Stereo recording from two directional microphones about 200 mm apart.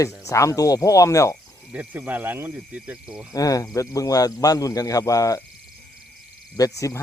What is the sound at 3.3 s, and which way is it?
Speech, 15° left (ahead or behind).